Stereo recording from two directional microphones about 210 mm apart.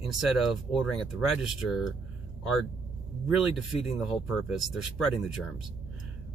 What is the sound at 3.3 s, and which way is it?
Speech, 5° right (ahead or behind).